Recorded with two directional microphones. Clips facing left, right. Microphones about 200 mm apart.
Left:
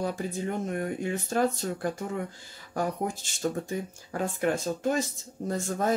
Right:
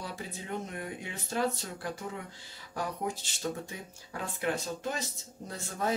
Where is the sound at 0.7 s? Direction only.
50° left (ahead or behind).